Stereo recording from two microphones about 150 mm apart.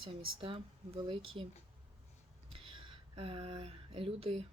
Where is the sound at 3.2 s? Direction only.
40° right (ahead or behind).